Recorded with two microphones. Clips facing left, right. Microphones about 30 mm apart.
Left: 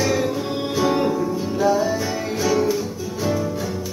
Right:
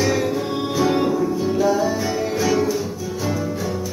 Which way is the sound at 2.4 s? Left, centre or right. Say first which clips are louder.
Left 1 dB; centre.